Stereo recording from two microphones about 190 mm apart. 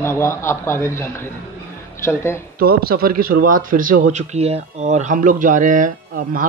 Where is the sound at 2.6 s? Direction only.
50° right (ahead or behind).